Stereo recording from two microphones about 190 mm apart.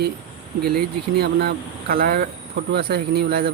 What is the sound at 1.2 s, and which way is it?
Speech, 55° right (ahead or behind).